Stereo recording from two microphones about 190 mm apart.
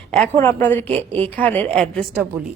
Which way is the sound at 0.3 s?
10° left (ahead or behind).